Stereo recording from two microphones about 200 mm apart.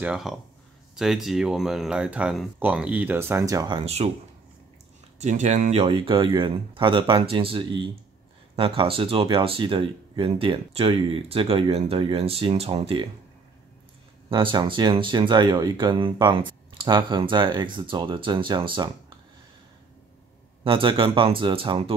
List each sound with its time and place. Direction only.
0.0 s speech: centre (ahead or behind); by 4.1 s 30° right (ahead or behind)
5.2 s speech: 35° right (ahead or behind)
14.3 s speech: 25° right (ahead or behind)
20.6 s speech: 25° right (ahead or behind)